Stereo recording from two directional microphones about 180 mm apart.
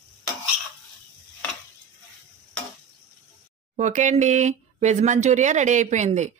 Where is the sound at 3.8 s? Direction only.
40° right (ahead or behind).